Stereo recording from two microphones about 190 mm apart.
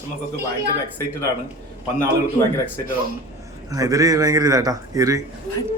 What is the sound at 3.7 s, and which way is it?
A man's voice, 20° right (ahead or behind).